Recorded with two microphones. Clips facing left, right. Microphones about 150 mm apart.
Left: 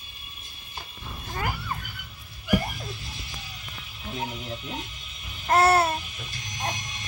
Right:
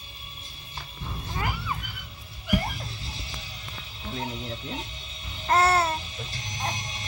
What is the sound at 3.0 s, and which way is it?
Music, 30° right (ahead or behind).